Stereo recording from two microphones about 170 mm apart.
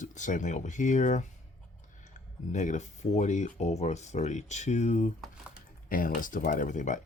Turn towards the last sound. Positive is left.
turn(degrees=45)  # may be behind; listen again after turning